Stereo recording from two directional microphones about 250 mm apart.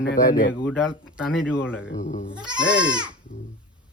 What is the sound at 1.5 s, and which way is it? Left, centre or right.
Speech, centre.